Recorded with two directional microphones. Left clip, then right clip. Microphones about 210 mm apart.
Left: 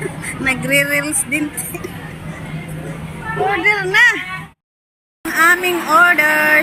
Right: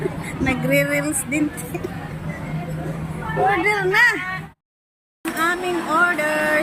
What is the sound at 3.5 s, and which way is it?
Speech, centre (ahead or behind).